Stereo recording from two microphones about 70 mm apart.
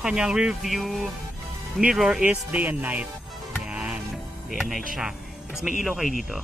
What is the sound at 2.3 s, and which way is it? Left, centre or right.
Speech, right.